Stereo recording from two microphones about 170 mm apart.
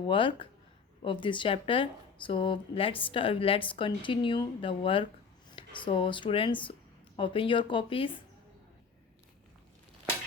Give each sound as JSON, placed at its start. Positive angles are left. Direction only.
{"t": 0.1, "sound": "a woman's voice", "side_deg": 30}